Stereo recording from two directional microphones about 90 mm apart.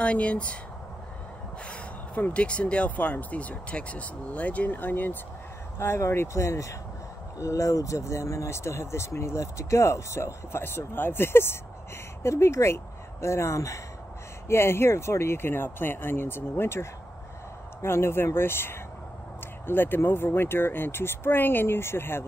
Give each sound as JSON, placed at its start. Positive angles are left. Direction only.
{"t": 0.0, "sound": "speech", "side_deg": 15}
{"t": 1.7, "sound": "speech", "side_deg": 15}
{"t": 5.8, "sound": "speech", "side_deg": 30}
{"t": 17.8, "sound": "speech", "side_deg": 25}